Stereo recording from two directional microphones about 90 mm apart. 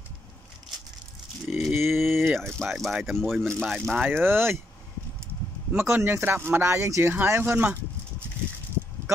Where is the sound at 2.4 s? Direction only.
Centre (ahead or behind).